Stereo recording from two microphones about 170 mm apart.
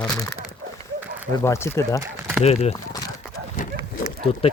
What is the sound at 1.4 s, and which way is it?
Speech, 15° left (ahead or behind).